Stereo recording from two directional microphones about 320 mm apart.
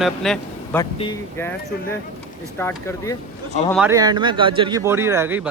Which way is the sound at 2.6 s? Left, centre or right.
Centre.